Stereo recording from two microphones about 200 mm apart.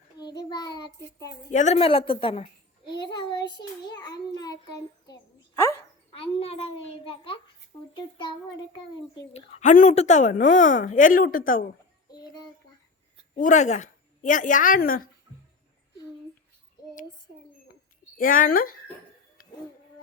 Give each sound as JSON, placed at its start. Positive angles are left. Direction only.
{"t": 0.2, "sound": "child singing", "side_deg": 20}
{"t": 1.5, "sound": "a child's voice", "side_deg": 35}
{"t": 3.8, "sound": "a child's voice", "side_deg": 20}
{"t": 6.1, "sound": "a child's voice", "side_deg": 30}
{"t": 9.3, "sound": "a woman's voice", "side_deg": 35}
{"t": 13.3, "sound": "a woman's voice", "side_deg": 35}
{"t": 18.2, "sound": "a woman's voice", "side_deg": 45}